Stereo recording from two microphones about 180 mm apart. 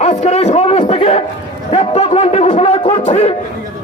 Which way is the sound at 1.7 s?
35° left (ahead or behind).